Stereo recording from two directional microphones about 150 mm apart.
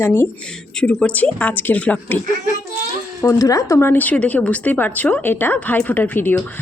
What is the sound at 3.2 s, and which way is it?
Speech, 20° left (ahead or behind).